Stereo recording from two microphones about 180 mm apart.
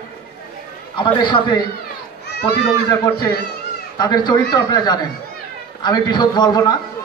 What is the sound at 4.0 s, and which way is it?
A man's voice, 25° left (ahead or behind).